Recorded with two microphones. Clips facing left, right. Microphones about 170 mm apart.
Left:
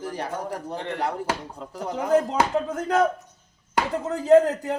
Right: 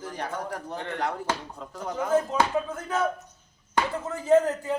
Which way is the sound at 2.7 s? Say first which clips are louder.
Left 6 dB; 75° left (ahead or behind).